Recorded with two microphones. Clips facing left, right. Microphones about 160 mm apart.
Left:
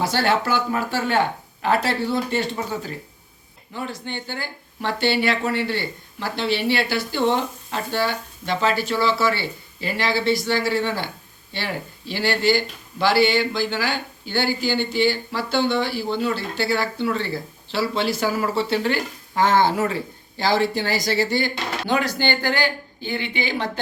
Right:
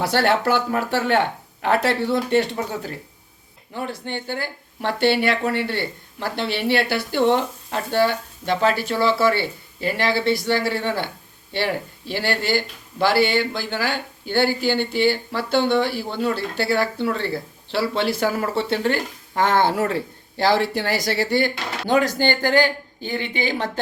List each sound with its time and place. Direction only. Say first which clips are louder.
0.0 s speech: right 2 dB; 65° right (ahead or behind)
3.8 s speech: right 2 dB; 55° right (ahead or behind)